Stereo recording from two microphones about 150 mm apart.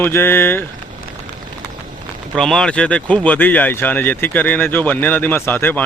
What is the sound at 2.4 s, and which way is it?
Speech, 5° left (ahead or behind).